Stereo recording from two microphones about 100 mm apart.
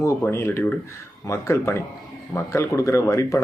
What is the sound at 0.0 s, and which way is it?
Speech, 25° left (ahead or behind).